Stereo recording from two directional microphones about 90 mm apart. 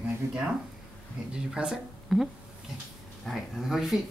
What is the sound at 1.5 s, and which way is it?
Speech, 5° right (ahead or behind).